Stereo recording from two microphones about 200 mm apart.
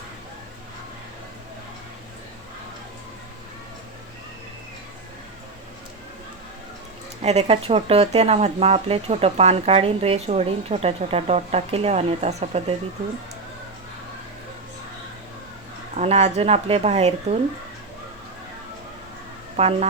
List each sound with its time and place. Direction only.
7.2 s speech: 30° right (ahead or behind)
16.0 s speech: 35° right (ahead or behind)
19.5 s speech: 30° right (ahead or behind)